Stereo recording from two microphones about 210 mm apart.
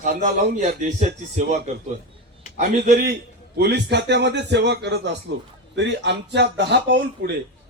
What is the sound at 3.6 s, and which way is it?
A man's voice, 55° right (ahead or behind).